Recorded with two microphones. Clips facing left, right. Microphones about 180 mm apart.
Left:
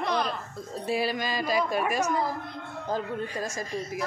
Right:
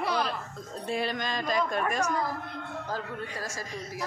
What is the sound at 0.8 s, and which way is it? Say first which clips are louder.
A woman's voice: left 3 dB; 5° left (ahead or behind).